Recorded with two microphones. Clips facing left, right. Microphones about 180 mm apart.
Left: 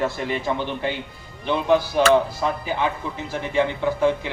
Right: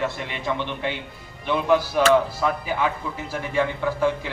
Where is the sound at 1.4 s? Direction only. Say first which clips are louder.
Left 1 dB; 30° left (ahead or behind).